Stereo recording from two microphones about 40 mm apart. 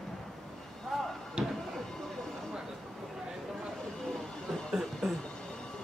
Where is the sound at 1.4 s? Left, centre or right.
Right.